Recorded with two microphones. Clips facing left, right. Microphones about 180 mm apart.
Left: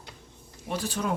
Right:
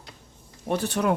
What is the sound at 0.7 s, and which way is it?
Speech, 65° right (ahead or behind).